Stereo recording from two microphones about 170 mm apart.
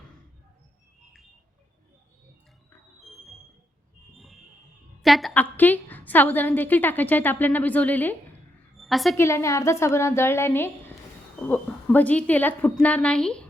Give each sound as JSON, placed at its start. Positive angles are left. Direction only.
{"t": 5.0, "sound": "a woman's voice", "side_deg": 0}
{"t": 8.8, "sound": "a sound", "side_deg": 0}
{"t": 9.1, "sound": "a woman's voice", "side_deg": 15}